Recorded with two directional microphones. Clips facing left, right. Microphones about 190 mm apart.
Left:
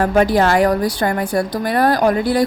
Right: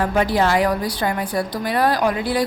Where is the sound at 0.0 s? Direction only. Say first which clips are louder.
Left 4 dB; 45° left (ahead or behind).